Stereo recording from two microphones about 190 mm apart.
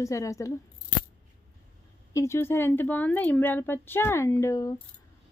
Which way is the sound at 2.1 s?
15° left (ahead or behind).